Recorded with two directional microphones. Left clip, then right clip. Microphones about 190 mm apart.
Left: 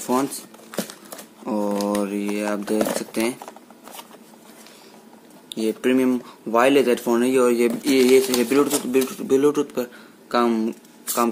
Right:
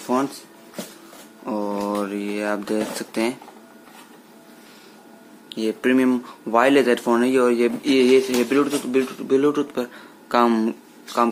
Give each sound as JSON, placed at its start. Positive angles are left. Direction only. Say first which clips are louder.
{"t": 0.0, "sound": "speech", "louder": "even", "side_deg": 35}
{"t": 1.4, "sound": "typewriter", "louder": "left 1 dB", "side_deg": 25}
{"t": 2.0, "sound": "a sound", "louder": "left 1 dB", "side_deg": 20}
{"t": 5.5, "sound": "speech", "louder": "even", "side_deg": 20}
{"t": 10.2, "sound": "speech", "louder": "right 2 dB", "side_deg": 5}